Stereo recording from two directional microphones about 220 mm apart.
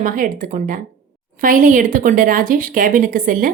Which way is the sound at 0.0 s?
40° right (ahead or behind).